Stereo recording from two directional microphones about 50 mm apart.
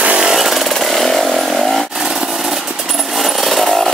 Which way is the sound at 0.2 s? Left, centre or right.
Centre.